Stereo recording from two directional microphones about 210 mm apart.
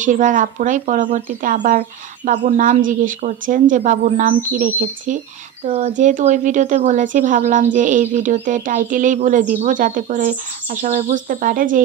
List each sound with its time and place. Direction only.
0.0 s speech: 35° right (ahead or behind)